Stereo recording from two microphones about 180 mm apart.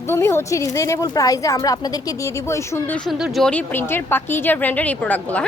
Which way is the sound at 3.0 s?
Centre (ahead or behind).